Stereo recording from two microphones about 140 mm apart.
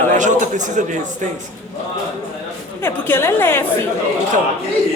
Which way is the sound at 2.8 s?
15° left (ahead or behind).